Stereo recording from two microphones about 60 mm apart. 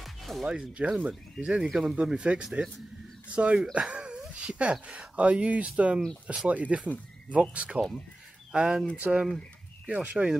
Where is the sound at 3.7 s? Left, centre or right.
Centre.